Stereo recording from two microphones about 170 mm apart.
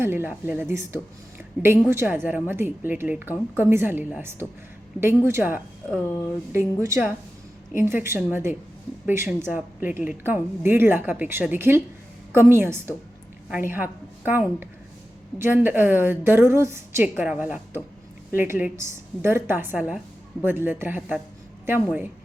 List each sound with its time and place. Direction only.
0.0 s a woman's voice: 15° right (ahead or behind)
1.9 s a woman's voice: 15° right (ahead or behind)
5.9 s speech: 10° left (ahead or behind)
6.5 s a woman's voice: 15° right (ahead or behind)